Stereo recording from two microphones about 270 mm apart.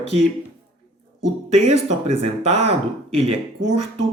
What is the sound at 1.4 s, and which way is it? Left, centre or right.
Speech, right.